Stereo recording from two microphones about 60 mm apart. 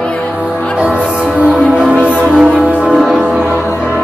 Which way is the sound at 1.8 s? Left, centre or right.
Centre.